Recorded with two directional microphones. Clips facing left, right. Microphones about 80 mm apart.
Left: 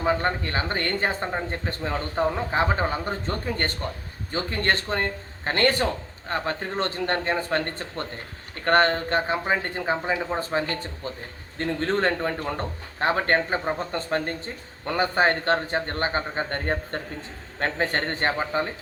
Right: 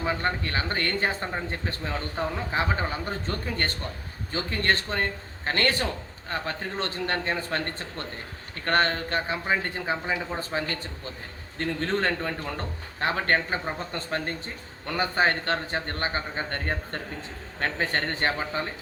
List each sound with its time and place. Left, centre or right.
0.0 s speech: left